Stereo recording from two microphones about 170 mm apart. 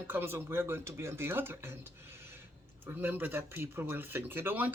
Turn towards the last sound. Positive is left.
turn(degrees=-10)  # may be behind; listen again after turning